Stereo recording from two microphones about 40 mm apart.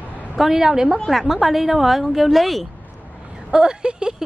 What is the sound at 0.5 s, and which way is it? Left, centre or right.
Speech, right.